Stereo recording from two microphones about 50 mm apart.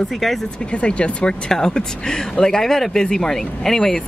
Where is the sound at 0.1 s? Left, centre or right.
Centre.